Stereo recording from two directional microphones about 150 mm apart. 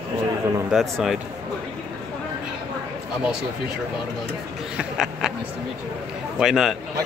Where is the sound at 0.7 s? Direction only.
Centre (ahead or behind).